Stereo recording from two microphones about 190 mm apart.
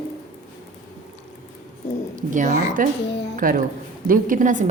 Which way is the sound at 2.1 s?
40° right (ahead or behind).